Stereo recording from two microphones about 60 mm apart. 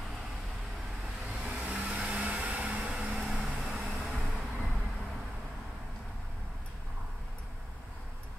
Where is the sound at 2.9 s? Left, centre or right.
Centre.